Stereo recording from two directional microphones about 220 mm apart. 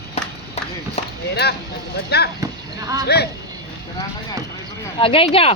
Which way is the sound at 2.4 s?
15° right (ahead or behind).